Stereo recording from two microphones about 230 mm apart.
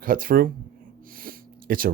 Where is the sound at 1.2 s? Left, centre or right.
Right.